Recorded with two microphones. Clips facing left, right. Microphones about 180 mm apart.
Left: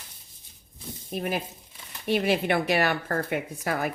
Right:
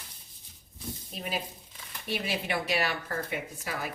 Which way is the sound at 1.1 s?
50° left (ahead or behind).